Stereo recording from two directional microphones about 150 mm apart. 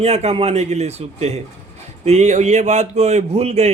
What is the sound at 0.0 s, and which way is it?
A man's voice, 45° right (ahead or behind).